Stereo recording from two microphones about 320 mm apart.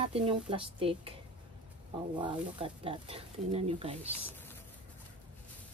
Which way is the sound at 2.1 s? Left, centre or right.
Centre.